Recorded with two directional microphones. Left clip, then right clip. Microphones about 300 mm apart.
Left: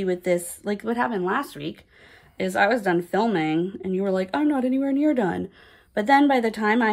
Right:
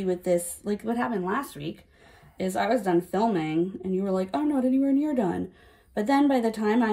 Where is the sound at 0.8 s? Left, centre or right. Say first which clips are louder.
Left 5 dB; centre.